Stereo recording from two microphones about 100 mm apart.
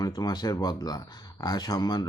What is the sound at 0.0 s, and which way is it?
Speech, 40° left (ahead or behind).